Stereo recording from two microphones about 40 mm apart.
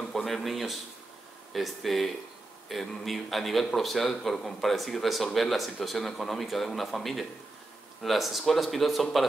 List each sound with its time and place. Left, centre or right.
0.1 s speech: centre